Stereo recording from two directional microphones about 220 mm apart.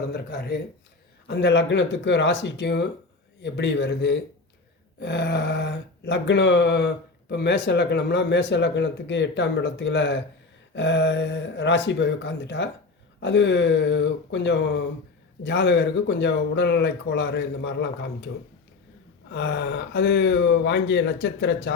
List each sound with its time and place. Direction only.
0.1 s speech: 45° left (ahead or behind)
19.3 s speech: 50° left (ahead or behind)